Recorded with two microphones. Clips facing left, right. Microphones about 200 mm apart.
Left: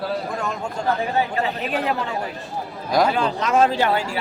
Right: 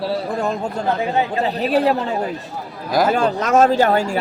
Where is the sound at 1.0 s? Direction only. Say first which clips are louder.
Right 3 dB; 20° right (ahead or behind).